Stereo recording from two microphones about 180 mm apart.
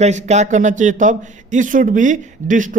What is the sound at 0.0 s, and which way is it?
A man's voice, 40° right (ahead or behind).